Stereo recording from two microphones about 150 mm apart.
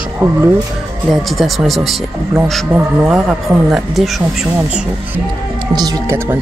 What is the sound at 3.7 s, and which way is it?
Speech, centre (ahead or behind).